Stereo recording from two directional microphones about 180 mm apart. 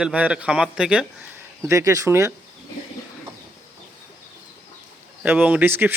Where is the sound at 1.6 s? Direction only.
15° right (ahead or behind).